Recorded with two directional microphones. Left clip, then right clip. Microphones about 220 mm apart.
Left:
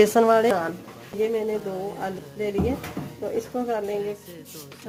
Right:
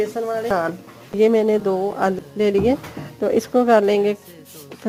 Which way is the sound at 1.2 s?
50° right (ahead or behind).